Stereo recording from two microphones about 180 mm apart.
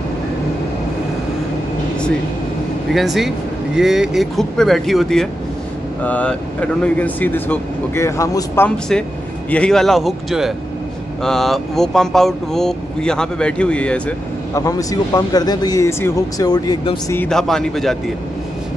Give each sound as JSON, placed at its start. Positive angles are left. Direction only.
{"t": 2.9, "sound": "speech", "side_deg": 0}
{"t": 8.6, "sound": "speech", "side_deg": 5}
{"t": 14.5, "sound": "speech", "side_deg": 20}
{"t": 17.1, "sound": "speech", "side_deg": 5}